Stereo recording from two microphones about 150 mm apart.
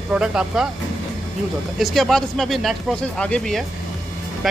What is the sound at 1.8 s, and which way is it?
Speech, centre (ahead or behind).